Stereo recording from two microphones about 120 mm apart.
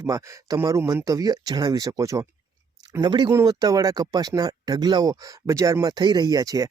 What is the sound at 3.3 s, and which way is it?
Speech, 30° right (ahead or behind).